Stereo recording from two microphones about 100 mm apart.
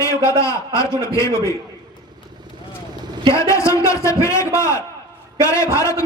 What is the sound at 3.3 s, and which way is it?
A man's voice, 30° left (ahead or behind).